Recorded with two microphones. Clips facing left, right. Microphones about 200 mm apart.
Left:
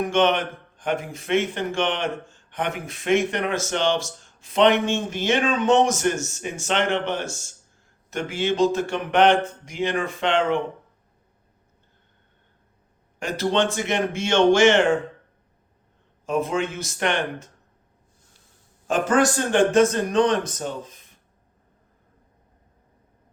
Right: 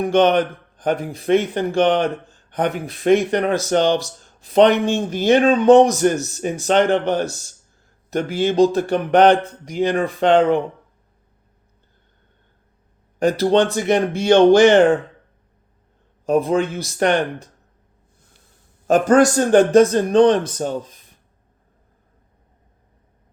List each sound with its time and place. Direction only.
0.0 s a man's voice: 35° right (ahead or behind)
13.1 s a man's voice: 35° right (ahead or behind)
16.2 s a man's voice: 35° right (ahead or behind)
18.9 s a man's voice: 40° right (ahead or behind)